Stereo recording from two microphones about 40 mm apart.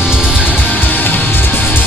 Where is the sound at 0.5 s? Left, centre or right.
Left.